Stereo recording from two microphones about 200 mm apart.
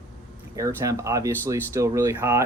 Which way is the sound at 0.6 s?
15° right (ahead or behind).